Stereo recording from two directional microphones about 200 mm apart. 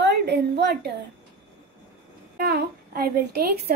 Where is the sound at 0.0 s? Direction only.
55° right (ahead or behind).